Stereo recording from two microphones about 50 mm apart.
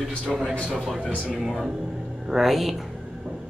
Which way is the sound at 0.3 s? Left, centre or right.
Centre.